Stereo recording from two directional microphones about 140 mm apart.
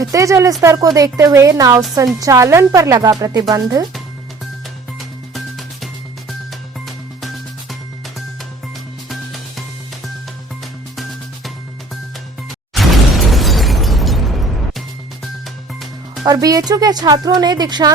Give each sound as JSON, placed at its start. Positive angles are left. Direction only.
{"t": 0.0, "sound": "speech", "side_deg": -25}
{"t": 4.9, "sound": "music", "side_deg": 0}
{"t": 10.9, "sound": "music", "side_deg": 0}
{"t": 16.2, "sound": "speech", "side_deg": -25}